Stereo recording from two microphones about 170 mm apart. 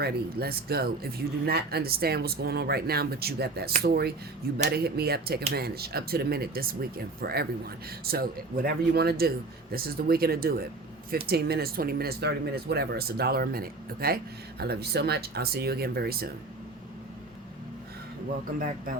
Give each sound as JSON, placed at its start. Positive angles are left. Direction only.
{"t": 0.0, "sound": "speech", "side_deg": -65}